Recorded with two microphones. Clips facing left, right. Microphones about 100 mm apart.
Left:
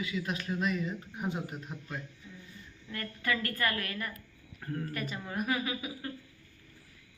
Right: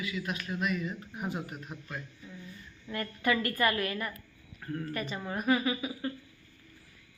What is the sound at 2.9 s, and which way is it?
A woman's voice, 20° right (ahead or behind).